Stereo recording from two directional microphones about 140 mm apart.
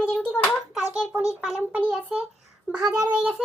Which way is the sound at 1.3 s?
5° right (ahead or behind).